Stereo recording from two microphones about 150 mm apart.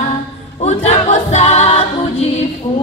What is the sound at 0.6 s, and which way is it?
Music, 45° left (ahead or behind).